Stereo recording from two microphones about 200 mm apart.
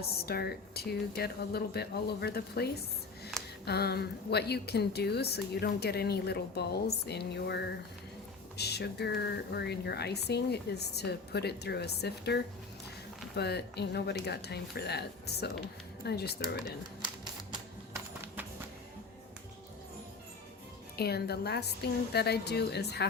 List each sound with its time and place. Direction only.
0.2 s speech: 50° left (ahead or behind)
3.3 s a sound: centre (ahead or behind)
3.7 s a woman's voice: 55° left (ahead or behind)
20.9 s a woman's voice: 50° left (ahead or behind)